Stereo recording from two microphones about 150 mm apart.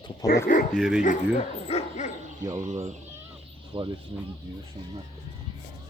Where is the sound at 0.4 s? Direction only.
65° left (ahead or behind).